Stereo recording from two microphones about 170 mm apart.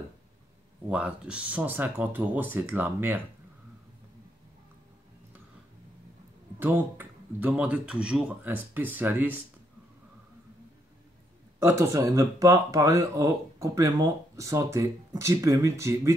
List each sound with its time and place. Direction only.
0.8 s speech: 5° right (ahead or behind)
6.6 s speech: 10° right (ahead or behind)
11.6 s speech: 20° right (ahead or behind)